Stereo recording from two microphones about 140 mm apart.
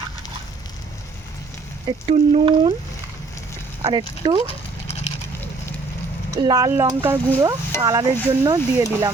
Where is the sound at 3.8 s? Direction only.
30° right (ahead or behind).